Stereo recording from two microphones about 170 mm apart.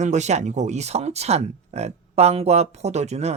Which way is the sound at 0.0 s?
45° right (ahead or behind).